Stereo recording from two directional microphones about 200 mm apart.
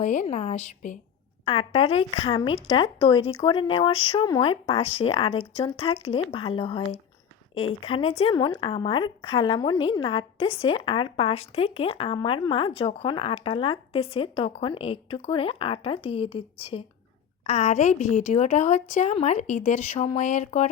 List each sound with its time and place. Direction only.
0.0 s a woman's voice: 35° left (ahead or behind)